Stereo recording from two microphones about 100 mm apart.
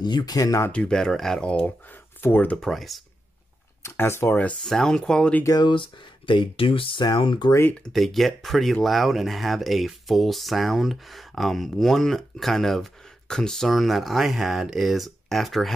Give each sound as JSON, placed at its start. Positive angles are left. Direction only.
{"t": 0.0, "sound": "speech", "side_deg": 45}
{"t": 0.7, "sound": "speech", "side_deg": 10}
{"t": 2.5, "sound": "speech", "side_deg": 0}
{"t": 3.8, "sound": "speech", "side_deg": 25}
{"t": 4.6, "sound": "speech", "side_deg": 5}
{"t": 5.6, "sound": "speech", "side_deg": 55}
{"t": 7.8, "sound": "speech", "side_deg": 0}